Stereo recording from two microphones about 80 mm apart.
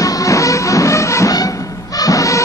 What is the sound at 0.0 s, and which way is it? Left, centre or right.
Music, left.